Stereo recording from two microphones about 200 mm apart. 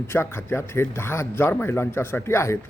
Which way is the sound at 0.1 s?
10° left (ahead or behind).